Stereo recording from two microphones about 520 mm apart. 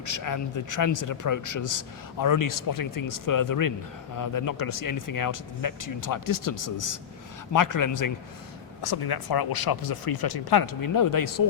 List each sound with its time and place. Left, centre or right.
0.0 s speech: left